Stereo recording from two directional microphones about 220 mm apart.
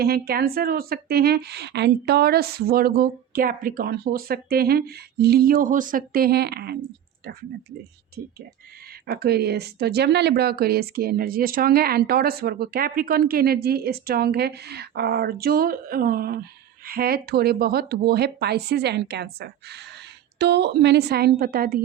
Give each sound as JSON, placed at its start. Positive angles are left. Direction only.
{"t": 0.0, "sound": "speech", "side_deg": -45}
{"t": 9.0, "sound": "speech", "side_deg": -45}